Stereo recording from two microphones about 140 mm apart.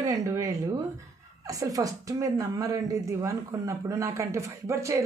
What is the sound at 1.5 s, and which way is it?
A woman's voice, 25° right (ahead or behind).